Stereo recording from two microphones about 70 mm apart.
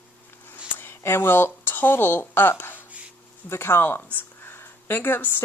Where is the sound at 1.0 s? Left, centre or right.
Left.